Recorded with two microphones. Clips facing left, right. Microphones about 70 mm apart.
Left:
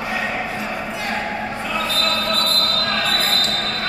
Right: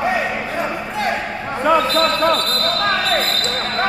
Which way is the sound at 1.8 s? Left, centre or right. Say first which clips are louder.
Right 6 dB; centre.